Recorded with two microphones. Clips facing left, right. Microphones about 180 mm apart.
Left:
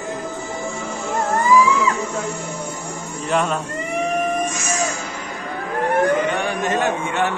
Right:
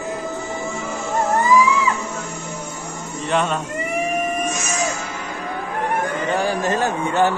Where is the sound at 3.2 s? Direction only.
Centre (ahead or behind).